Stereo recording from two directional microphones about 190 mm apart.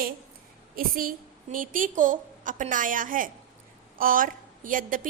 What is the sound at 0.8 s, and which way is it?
A woman's voice, 50° right (ahead or behind).